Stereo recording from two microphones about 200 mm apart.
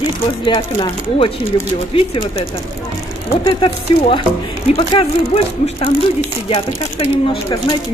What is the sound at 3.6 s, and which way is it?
Speech, 25° left (ahead or behind).